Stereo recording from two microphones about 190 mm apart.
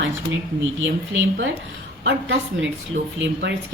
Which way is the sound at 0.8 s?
80° right.